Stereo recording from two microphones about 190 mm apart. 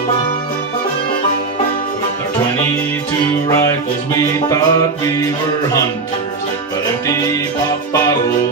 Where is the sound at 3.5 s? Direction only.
15° left (ahead or behind).